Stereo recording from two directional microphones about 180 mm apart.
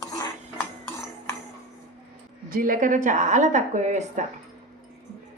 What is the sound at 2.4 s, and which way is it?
A woman's voice, 50° right (ahead or behind).